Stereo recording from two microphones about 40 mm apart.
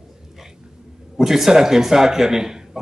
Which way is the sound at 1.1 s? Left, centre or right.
Centre.